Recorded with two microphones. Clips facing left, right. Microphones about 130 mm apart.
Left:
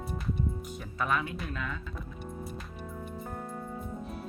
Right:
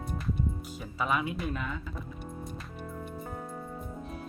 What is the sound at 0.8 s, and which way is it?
Speech, 5° right (ahead or behind).